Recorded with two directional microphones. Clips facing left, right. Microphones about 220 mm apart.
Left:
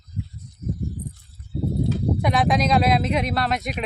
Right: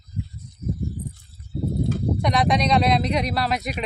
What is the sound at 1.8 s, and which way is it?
Clip-clop, 50° right (ahead or behind).